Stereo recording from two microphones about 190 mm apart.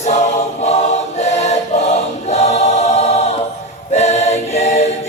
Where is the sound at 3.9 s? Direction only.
35° left (ahead or behind).